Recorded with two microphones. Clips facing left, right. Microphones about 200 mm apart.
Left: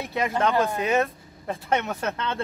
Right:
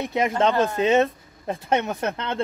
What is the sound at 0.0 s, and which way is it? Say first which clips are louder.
A man's voice: right 3 dB; 20° right (ahead or behind).